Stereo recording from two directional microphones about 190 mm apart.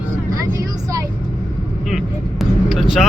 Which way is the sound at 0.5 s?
20° right (ahead or behind).